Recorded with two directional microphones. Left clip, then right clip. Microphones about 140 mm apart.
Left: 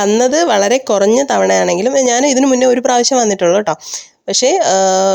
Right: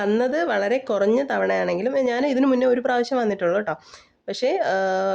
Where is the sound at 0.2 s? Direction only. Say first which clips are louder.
Left 10 dB; 50° left (ahead or behind).